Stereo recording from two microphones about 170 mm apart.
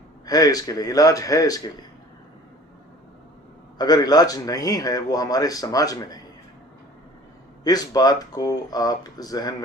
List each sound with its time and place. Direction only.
0.3 s a man's voice: 20° left (ahead or behind)
3.8 s a man's voice: 25° left (ahead or behind)
7.6 s a man's voice: 20° left (ahead or behind)